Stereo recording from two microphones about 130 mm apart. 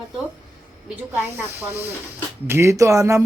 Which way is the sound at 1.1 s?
20° right (ahead or behind).